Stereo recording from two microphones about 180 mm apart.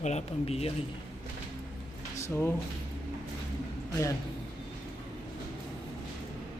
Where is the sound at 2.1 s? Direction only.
15° left (ahead or behind).